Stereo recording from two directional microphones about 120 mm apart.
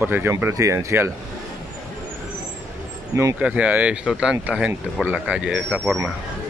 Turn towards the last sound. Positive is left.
turn(degrees=-10)  # may be behind; listen again after turning